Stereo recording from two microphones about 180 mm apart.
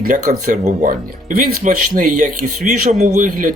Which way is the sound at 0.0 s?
45° right (ahead or behind).